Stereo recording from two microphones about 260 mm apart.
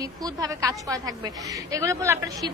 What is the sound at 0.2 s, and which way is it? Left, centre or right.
A woman's voice, centre.